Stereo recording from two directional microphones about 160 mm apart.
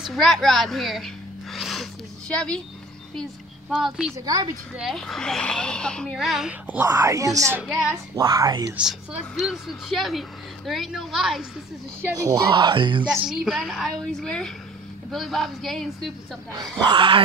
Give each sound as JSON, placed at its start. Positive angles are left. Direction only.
{"t": 0.0, "sound": "a sound", "side_deg": 0}
{"t": 3.7, "sound": "speech", "side_deg": -5}
{"t": 6.9, "sound": "speech", "side_deg": -20}
{"t": 7.6, "sound": "speech", "side_deg": 0}
{"t": 8.2, "sound": "speech", "side_deg": -20}
{"t": 8.7, "sound": "speech", "side_deg": 0}
{"t": 12.2, "sound": "speech", "side_deg": -25}
{"t": 13.1, "sound": "speech", "side_deg": 0}
{"t": 16.8, "sound": "speech", "side_deg": -30}